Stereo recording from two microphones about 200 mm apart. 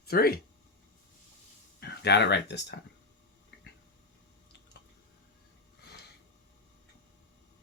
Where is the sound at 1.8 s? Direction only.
55° left (ahead or behind).